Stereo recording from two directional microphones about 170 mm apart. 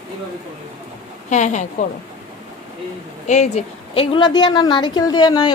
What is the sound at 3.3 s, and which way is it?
A woman's voice, 45° left (ahead or behind).